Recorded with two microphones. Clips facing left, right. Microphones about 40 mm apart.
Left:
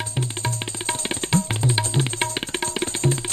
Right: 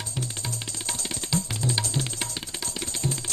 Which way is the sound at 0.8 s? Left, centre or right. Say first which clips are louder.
Left 8 dB; left.